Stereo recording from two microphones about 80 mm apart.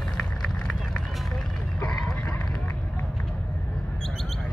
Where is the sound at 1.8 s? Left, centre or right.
Centre.